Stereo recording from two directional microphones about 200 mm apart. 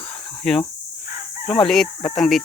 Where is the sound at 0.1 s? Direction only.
5° left (ahead or behind).